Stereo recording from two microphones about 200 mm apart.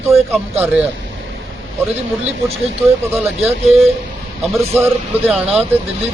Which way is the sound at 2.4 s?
30° right (ahead or behind).